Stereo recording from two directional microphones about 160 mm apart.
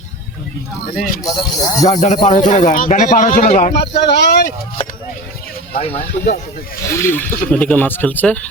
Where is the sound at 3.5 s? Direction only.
40° left (ahead or behind).